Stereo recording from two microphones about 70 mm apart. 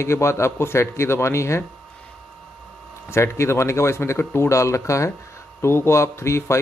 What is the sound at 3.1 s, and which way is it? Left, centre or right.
A man's voice, left.